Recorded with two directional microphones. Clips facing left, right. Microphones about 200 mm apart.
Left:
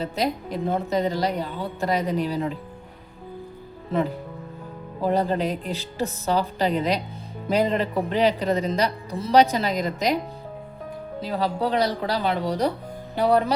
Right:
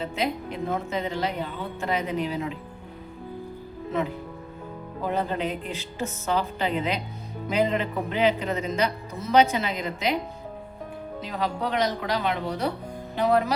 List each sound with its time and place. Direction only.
0.0 s speech: 35° left (ahead or behind)
5.0 s speech: 35° left (ahead or behind)
11.2 s speech: 35° left (ahead or behind)